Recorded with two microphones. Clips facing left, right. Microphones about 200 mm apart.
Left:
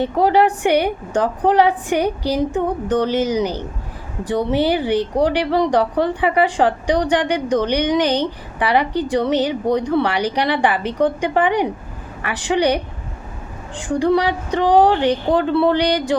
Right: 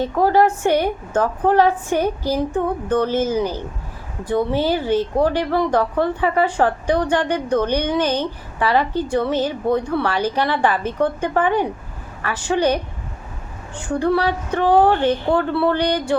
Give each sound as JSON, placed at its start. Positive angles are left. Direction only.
{"t": 0.0, "sound": "speech", "side_deg": 15}